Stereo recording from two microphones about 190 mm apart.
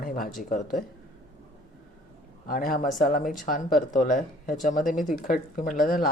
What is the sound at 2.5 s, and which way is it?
Speech, 50° left (ahead or behind).